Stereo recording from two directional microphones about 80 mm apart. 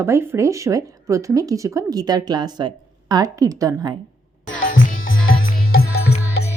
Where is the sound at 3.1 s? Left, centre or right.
Right.